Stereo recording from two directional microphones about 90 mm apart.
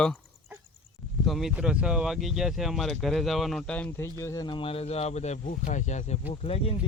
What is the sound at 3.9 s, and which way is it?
Speech, 30° left (ahead or behind).